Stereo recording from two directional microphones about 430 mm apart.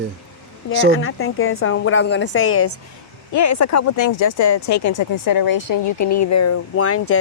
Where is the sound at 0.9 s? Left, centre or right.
Left.